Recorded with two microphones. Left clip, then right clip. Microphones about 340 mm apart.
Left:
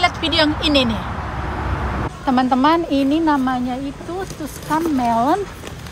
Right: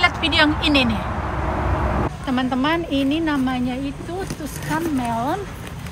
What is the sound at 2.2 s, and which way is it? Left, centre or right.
Speech, left.